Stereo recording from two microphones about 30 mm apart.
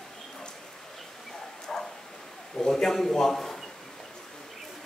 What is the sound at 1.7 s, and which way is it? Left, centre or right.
Bow-wow, centre.